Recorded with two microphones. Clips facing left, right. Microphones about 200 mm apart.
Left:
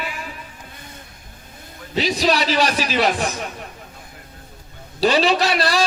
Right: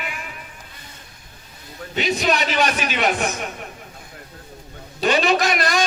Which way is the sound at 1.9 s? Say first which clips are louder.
Left 2 dB; 35° left (ahead or behind).